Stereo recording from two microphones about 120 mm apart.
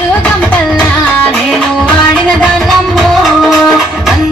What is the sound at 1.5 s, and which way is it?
Music, 5° left (ahead or behind).